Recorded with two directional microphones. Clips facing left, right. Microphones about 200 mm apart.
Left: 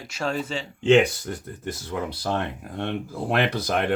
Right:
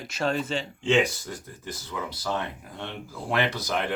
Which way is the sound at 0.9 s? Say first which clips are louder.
Left 5 dB; 60° left (ahead or behind).